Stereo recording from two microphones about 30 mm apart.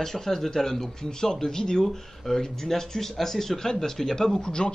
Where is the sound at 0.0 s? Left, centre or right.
Centre.